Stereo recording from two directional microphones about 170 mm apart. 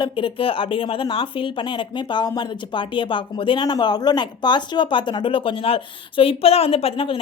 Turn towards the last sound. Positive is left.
turn(degrees=35)  # may be behind; listen again after turning